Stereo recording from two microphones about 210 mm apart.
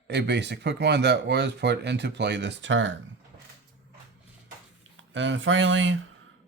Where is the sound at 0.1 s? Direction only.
55° right (ahead or behind).